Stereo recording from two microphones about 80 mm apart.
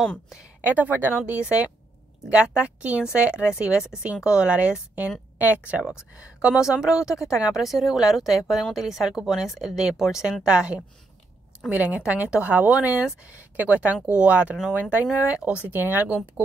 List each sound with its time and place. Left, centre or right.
0.6 s a woman's voice: right